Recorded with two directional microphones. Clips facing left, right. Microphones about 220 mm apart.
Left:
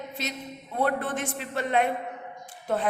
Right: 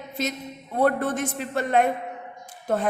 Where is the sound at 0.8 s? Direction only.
45° right (ahead or behind).